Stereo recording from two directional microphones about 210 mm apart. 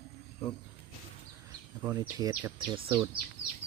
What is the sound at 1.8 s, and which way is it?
Speech, 15° right (ahead or behind).